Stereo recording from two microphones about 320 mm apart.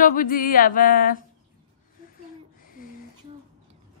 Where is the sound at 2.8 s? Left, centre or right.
Left.